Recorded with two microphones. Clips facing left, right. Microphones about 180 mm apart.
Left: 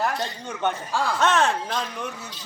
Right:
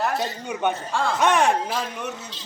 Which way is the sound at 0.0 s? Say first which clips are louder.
Right 1 dB; centre (ahead or behind).